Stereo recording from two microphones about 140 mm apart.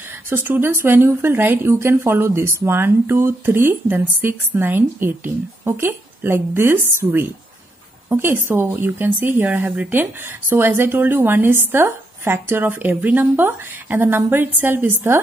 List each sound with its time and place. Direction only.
0.3 s a woman's voice: 15° right (ahead or behind)